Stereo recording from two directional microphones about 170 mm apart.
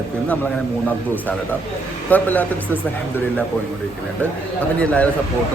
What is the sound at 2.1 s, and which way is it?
Speech, 10° left (ahead or behind).